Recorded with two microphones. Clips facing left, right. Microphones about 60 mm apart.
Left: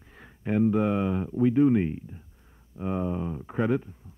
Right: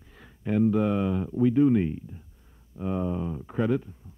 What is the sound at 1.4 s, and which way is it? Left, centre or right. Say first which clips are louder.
Speech: even; left.